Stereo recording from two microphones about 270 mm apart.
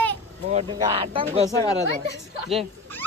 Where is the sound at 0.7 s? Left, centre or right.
Centre.